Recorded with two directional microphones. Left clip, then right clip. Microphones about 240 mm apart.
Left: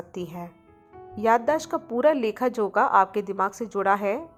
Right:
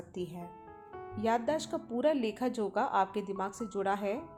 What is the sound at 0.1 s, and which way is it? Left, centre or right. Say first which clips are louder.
A woman's voice: left 6 dB; centre.